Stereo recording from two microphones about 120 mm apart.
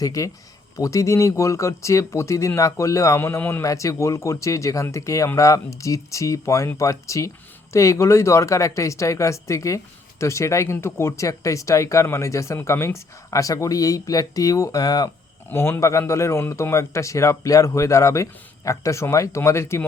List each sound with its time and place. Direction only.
0.0 s speech: 30° left (ahead or behind)
15.4 s speech: 20° left (ahead or behind)